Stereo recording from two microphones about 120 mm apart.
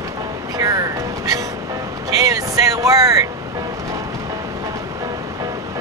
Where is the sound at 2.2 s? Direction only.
30° right (ahead or behind).